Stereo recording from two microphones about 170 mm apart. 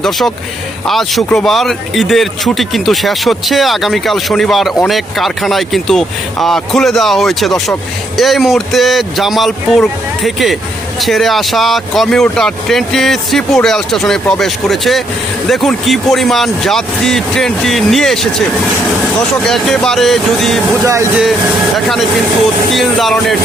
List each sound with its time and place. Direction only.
0.9 s speech: centre (ahead or behind)
19.5 s speech: centre (ahead or behind)
20.8 s speech: 15° right (ahead or behind)
21.8 s speech: centre (ahead or behind)